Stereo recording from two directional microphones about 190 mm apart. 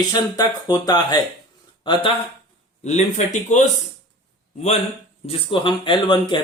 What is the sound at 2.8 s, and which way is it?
Speech, 35° left (ahead or behind).